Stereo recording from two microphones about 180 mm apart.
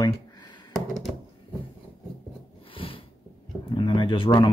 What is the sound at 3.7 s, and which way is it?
Speech, 25° left (ahead or behind).